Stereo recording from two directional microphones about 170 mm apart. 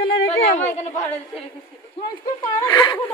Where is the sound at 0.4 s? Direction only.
40° left (ahead or behind).